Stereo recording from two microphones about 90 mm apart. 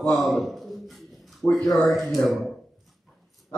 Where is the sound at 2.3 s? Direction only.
Centre (ahead or behind).